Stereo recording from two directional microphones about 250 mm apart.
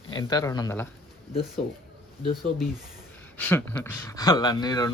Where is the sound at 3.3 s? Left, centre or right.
Centre.